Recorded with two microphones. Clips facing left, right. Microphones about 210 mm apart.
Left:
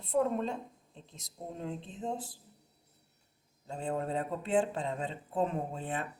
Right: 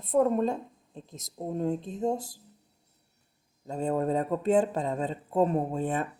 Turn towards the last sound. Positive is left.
turn(degrees=-45)  # may be behind; listen again after turning